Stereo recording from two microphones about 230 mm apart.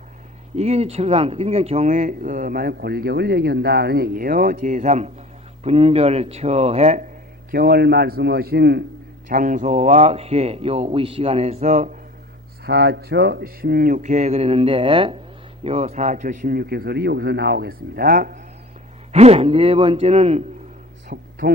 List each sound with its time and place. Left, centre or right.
0.5 s speech: right
7.5 s a man's voice: right
9.3 s speech: right
12.6 s speech: right
19.1 s speech: right
21.1 s a sound: right